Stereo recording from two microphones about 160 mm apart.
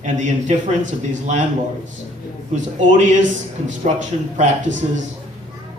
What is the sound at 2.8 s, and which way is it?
A man's voice, 50° right (ahead or behind).